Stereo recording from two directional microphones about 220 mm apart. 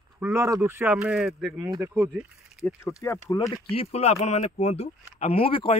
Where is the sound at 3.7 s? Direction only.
25° left (ahead or behind).